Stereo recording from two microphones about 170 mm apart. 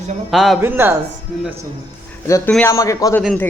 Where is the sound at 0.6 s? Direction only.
15° right (ahead or behind).